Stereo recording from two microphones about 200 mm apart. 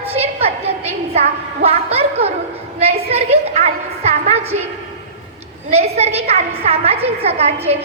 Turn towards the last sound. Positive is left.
turn(degrees=-30)  # may be behind; listen again after turning